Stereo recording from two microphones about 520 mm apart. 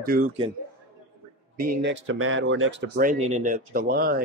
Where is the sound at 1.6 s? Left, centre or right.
Centre.